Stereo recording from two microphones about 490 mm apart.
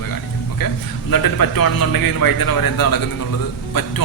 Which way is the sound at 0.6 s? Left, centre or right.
Left.